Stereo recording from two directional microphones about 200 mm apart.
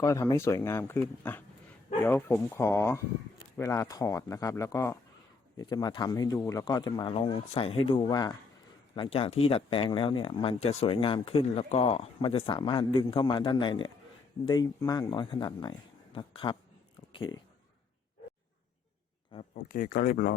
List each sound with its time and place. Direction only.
0.0 s speech: 15° left (ahead or behind)
19.3 s speech: 25° left (ahead or behind)
19.6 s speech: 45° left (ahead or behind)